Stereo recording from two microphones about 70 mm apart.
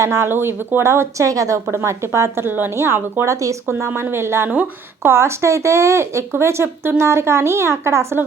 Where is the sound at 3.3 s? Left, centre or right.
Right.